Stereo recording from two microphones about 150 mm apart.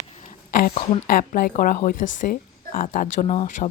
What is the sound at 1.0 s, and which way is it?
A woman's voice, 75° left (ahead or behind).